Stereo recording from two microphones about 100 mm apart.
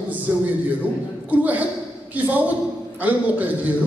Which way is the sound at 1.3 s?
15° right (ahead or behind).